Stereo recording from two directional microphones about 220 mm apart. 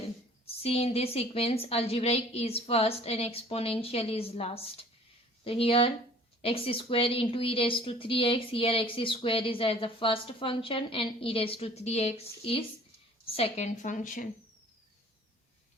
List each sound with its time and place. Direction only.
0.4 s a woman's voice: 25° left (ahead or behind)